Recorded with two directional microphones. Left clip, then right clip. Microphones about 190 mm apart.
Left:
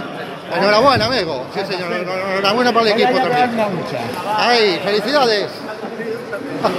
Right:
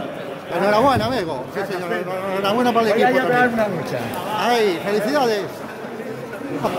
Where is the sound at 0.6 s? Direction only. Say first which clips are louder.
Left 4 dB; 25° right (ahead or behind).